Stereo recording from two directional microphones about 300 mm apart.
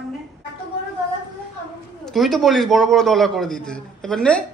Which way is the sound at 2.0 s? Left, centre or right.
Centre.